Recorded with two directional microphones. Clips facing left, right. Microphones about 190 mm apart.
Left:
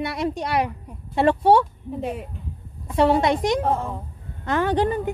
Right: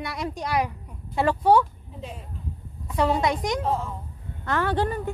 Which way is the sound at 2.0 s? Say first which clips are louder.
Left 10 dB; 60° left (ahead or behind).